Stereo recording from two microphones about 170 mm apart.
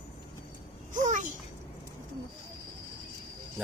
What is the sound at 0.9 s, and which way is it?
Speech, 45° right (ahead or behind).